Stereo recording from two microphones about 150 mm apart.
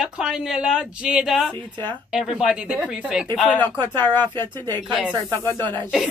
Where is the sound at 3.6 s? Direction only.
15° left (ahead or behind).